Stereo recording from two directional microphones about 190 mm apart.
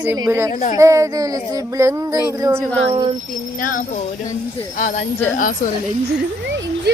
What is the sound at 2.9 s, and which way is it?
Speech, 30° right (ahead or behind).